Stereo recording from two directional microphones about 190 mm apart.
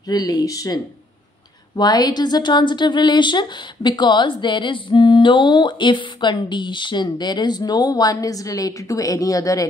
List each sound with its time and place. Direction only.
0.1 s a woman's voice: 20° left (ahead or behind)
1.8 s a woman's voice: 20° left (ahead or behind)